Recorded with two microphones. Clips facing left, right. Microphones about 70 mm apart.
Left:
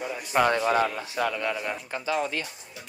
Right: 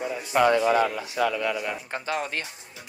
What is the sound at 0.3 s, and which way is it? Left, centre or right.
Speech, left.